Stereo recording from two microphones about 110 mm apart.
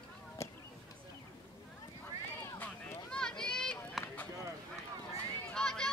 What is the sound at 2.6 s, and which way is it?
Run, 5° left (ahead or behind).